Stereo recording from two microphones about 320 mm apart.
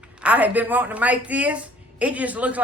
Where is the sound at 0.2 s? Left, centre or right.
Centre.